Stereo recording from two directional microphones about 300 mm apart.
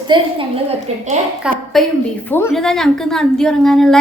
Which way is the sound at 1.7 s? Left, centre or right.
Centre.